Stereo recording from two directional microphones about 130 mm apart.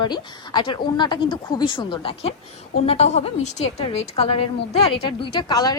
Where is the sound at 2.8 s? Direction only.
55° left (ahead or behind).